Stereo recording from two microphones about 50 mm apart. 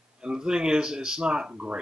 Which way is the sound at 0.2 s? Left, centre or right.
Centre.